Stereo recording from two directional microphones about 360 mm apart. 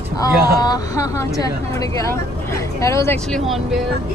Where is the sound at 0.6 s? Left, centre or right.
Centre.